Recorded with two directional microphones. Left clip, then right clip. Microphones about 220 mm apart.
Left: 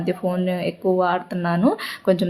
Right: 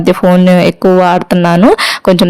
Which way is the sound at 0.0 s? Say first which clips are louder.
Right 15 dB; 45° right (ahead or behind).